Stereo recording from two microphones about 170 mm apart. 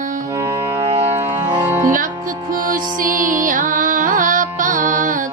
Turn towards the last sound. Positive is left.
turn(degrees=-50)  # may be behind; listen again after turning